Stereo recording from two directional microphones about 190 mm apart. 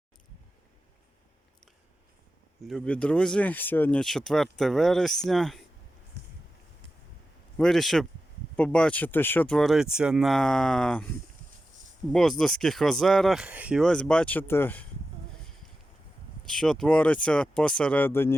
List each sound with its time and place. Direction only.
2.6 s speech: 5° left (ahead or behind)
6.2 s a sound: 60° right (ahead or behind)
7.5 s speech: centre (ahead or behind)
12.1 s speech: 5° left (ahead or behind)
16.5 s speech: 5° left (ahead or behind)